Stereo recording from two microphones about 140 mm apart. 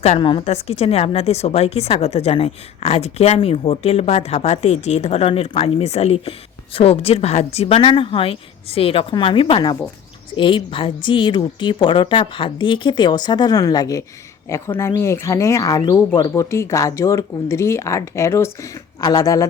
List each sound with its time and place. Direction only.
0.2 s a woman's voice: 35° left (ahead or behind)